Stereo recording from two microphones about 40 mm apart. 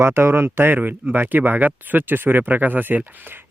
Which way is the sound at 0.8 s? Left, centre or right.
Right.